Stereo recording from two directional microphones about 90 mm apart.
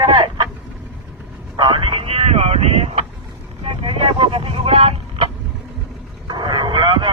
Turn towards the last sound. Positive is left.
turn(degrees=-60)  # may be behind; listen again after turning